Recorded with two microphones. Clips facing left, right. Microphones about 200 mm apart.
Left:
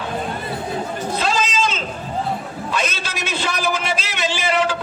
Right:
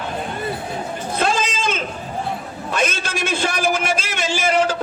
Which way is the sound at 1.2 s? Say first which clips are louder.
Right 1 dB; 55° right (ahead or behind).